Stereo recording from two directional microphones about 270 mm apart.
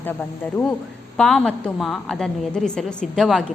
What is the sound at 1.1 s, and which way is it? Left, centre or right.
A woman's voice, centre.